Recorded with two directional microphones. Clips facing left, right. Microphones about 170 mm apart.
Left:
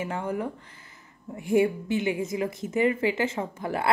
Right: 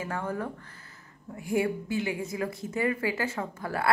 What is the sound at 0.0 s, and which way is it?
A woman's voice, 20° left (ahead or behind).